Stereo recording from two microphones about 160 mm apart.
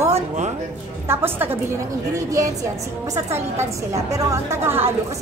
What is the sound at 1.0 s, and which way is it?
Speech, 15° right (ahead or behind).